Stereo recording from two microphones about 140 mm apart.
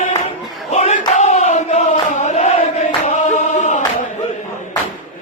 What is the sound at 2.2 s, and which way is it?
Chant, 55° left (ahead or behind).